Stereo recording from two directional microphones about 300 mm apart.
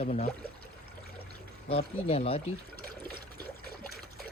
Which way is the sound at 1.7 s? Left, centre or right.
Centre.